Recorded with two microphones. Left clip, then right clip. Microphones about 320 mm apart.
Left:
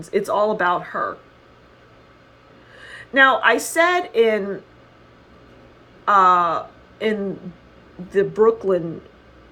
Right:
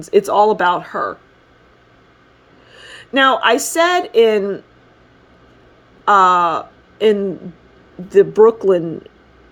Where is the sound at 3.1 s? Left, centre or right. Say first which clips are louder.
Right 2 dB; right.